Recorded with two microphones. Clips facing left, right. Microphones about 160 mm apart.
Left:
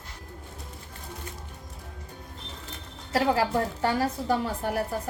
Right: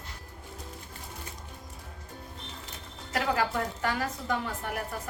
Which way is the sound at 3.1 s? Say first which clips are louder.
Left 5 dB; 30° left (ahead or behind).